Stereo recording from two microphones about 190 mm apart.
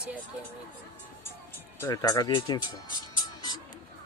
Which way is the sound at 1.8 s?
15° left (ahead or behind).